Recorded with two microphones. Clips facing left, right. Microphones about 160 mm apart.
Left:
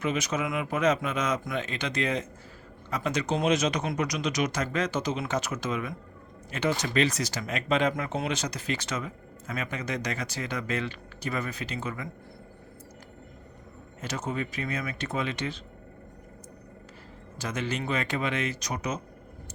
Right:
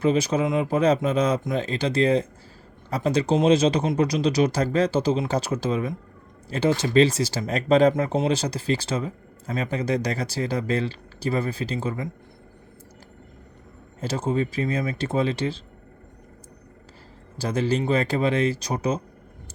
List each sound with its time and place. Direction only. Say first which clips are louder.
0.0 s speech: right 8 dB; 30° right (ahead or behind)
14.0 s speech: right 7 dB; 30° right (ahead or behind)
17.3 s speech: right 8 dB; 35° right (ahead or behind)